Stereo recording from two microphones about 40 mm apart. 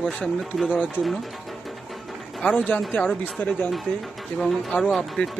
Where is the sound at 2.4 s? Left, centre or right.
Left.